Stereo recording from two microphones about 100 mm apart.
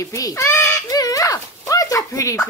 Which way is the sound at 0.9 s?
35° left (ahead or behind).